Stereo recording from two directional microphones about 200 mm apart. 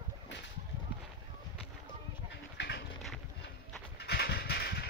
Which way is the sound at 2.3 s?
60° left (ahead or behind).